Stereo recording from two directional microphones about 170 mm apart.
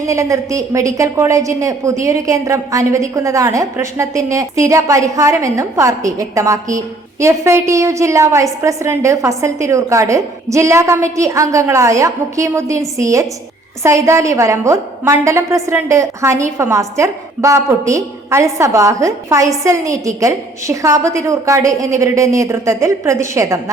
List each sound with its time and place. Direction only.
0.0 s a woman's voice: 20° right (ahead or behind)